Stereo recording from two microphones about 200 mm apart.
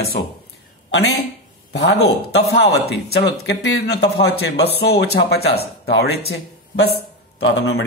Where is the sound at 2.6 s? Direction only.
55° left (ahead or behind).